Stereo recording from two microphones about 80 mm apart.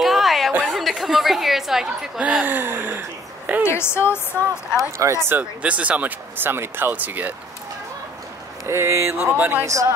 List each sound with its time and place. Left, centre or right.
0.0 s a sound: centre
0.7 s speech: centre
2.4 s gasp: right
3.6 s a woman's voice: left
4.9 s speech: right
5.4 s speech: centre
8.6 s speech: right
9.7 s speech: right